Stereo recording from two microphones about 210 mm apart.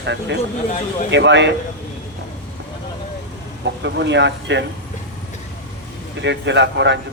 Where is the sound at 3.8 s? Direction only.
55° right (ahead or behind).